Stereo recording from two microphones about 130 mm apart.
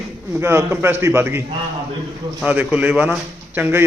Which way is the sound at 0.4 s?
20° right (ahead or behind).